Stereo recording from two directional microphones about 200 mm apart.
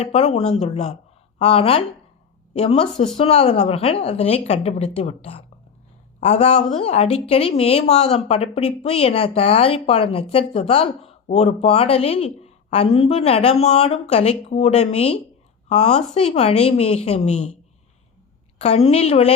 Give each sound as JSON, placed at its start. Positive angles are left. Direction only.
{"t": 0.0, "sound": "a woman's voice", "side_deg": 30}
{"t": 18.6, "sound": "speech", "side_deg": 30}